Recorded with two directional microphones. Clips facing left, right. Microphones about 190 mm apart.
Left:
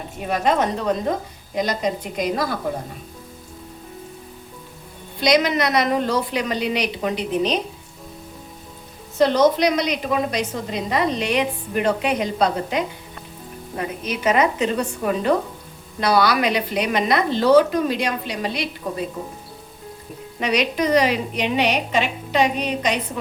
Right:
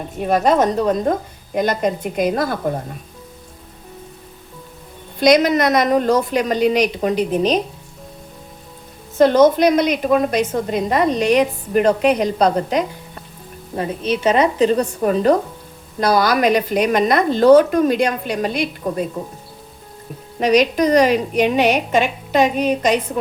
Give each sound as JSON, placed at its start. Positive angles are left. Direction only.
{"t": 0.3, "sound": "a woman's voice", "side_deg": -40}
{"t": 1.5, "sound": "a woman's voice", "side_deg": -55}
{"t": 5.2, "sound": "a woman's voice", "side_deg": -45}
{"t": 9.1, "sound": "a woman's voice", "side_deg": -50}
{"t": 13.7, "sound": "a woman's voice", "side_deg": -30}
{"t": 20.4, "sound": "a woman's voice", "side_deg": -45}